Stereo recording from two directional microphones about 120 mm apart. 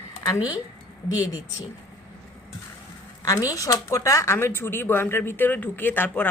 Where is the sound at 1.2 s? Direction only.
35° left (ahead or behind).